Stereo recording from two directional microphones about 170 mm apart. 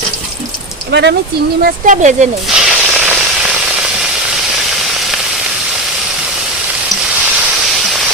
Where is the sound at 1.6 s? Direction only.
45° right (ahead or behind).